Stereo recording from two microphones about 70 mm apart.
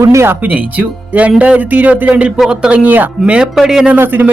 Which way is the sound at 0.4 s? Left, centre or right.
Right.